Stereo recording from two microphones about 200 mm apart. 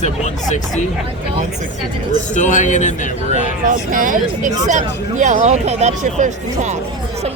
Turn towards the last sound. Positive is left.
turn(degrees=-40)  # may be behind; listen again after turning